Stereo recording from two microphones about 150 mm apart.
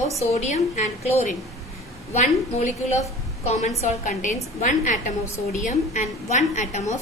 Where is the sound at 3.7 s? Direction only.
55° left (ahead or behind).